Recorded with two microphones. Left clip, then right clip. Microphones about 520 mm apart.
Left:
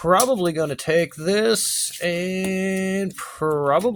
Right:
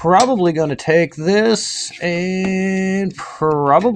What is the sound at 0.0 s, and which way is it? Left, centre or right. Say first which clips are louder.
Speech: right 5 dB; left.